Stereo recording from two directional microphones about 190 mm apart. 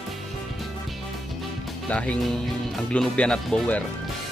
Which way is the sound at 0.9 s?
Centre (ahead or behind).